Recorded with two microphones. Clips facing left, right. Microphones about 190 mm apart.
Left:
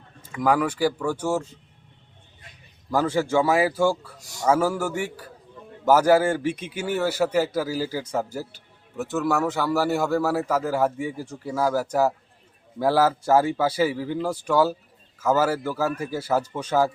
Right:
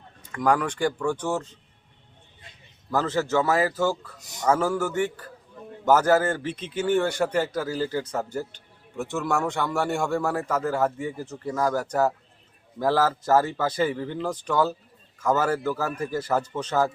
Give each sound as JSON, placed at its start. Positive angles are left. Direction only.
{"t": 0.2, "sound": "a man's voice", "side_deg": 5}
{"t": 2.9, "sound": "a man's voice", "side_deg": 10}
{"t": 4.2, "sound": "a man's voice", "side_deg": -20}
{"t": 4.4, "sound": "a man's voice", "side_deg": 10}